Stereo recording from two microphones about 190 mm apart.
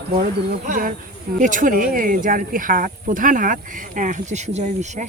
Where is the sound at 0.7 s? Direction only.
45° right (ahead or behind).